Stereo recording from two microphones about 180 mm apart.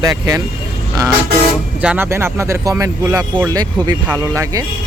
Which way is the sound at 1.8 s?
10° right (ahead or behind).